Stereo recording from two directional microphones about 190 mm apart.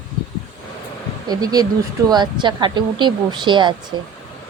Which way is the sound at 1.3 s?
20° right (ahead or behind).